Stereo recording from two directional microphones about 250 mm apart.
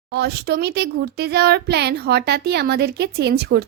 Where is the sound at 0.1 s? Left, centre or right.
Right.